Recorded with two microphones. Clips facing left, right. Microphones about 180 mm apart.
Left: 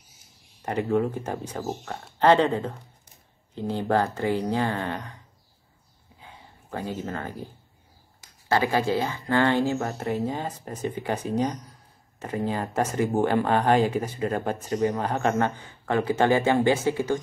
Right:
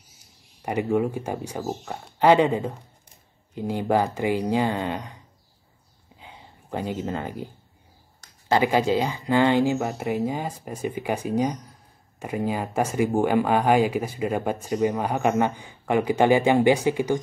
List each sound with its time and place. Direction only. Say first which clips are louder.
0.6 s speech: right 1 dB; 15° right (ahead or behind)
1.6 s speech: right 1 dB; centre (ahead or behind); by 5.2 s 15° right (ahead or behind)
6.2 s a sound: right 2 dB; 20° right (ahead or behind)
8.5 s speech: right 3 dB; 20° right (ahead or behind)